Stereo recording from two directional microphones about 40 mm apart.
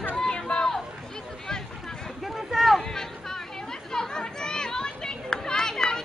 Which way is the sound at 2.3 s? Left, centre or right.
Centre.